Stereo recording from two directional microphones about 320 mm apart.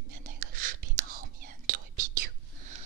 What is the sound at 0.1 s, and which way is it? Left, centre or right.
Whispering, right.